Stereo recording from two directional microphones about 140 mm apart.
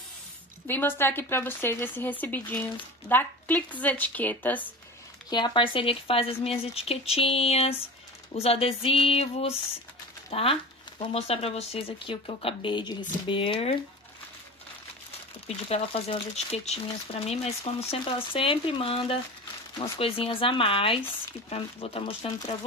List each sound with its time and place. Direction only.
0.7 s speech: 15° left (ahead or behind)
5.3 s speech: 35° left (ahead or behind)
15.4 s speech: 45° left (ahead or behind)